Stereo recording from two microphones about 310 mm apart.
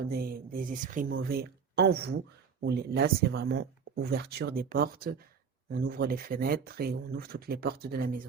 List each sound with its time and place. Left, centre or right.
0.1 s speech: right